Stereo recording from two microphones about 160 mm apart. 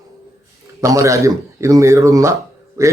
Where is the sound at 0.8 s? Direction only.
20° right (ahead or behind).